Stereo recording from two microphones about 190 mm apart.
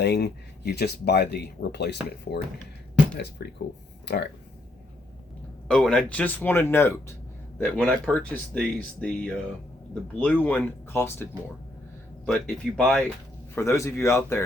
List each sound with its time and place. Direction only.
0.0 s speech: 60° left (ahead or behind)
3.4 s speech: 55° left (ahead or behind)
5.6 s speech: 5° left (ahead or behind)
13.6 s speech: 15° left (ahead or behind)